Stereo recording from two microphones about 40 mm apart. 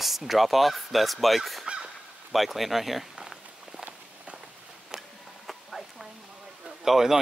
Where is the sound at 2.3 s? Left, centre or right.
Centre.